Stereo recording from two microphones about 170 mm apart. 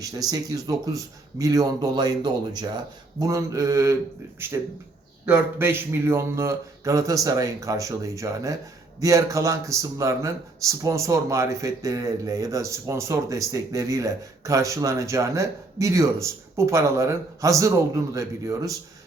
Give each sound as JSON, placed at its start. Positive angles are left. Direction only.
{"t": 0.0, "sound": "speech", "side_deg": -20}
{"t": 5.2, "sound": "speech", "side_deg": -15}